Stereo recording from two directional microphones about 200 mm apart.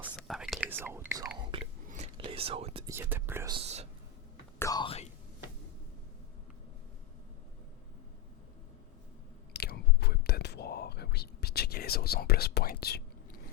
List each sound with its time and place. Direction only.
0.2 s whispering: centre (ahead or behind); by 2.8 s 30° right (ahead or behind)
2.8 s whispering: 10° right (ahead or behind)
3.5 s whispering: 30° right (ahead or behind)
4.6 s whispering: 20° left (ahead or behind)
9.5 s whispering: 55° left (ahead or behind)